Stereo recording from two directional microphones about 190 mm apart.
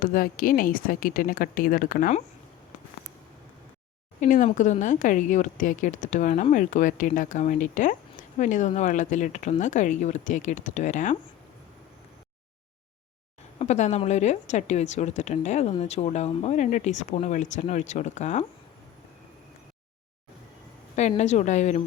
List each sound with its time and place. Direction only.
0.0 s a woman's voice: 45° left (ahead or behind)
4.2 s speech: 40° left (ahead or behind)
13.6 s speech: 40° left (ahead or behind)
21.2 s speech: 40° left (ahead or behind)